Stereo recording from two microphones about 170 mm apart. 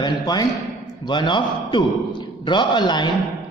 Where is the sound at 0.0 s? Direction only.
25° left (ahead or behind).